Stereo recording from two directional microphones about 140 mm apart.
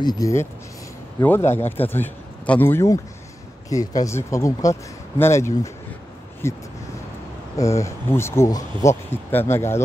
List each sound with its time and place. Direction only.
0.0 s a man's voice: 25° left (ahead or behind)